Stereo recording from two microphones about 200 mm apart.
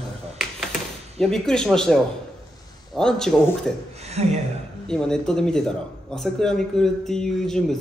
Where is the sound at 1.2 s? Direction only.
5° left (ahead or behind).